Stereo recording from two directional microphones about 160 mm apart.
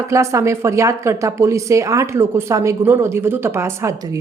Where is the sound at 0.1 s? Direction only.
20° right (ahead or behind).